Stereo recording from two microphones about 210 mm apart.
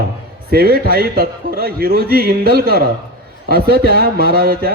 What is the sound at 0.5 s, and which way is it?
A man's voice, 45° right (ahead or behind).